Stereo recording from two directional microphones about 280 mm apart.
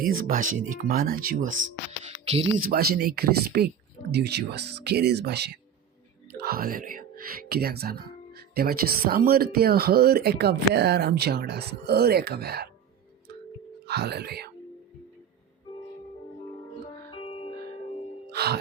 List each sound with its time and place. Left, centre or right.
0.0 s speech: right
2.6 s speech: right
13.8 s speech: right
17.2 s music: centre
18.3 s music: right